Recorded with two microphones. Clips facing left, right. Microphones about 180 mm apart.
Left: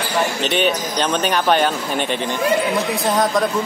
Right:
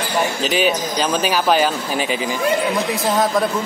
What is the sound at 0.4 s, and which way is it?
Speech, 5° right (ahead or behind).